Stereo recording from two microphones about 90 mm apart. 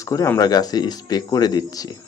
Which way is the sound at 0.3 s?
45° left (ahead or behind).